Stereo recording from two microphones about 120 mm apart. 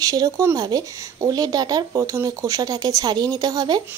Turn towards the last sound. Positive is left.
turn(degrees=-35)  # may be behind; listen again after turning